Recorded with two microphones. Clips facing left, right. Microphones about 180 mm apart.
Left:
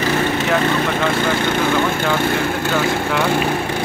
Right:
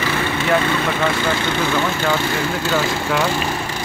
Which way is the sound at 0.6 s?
45° left (ahead or behind).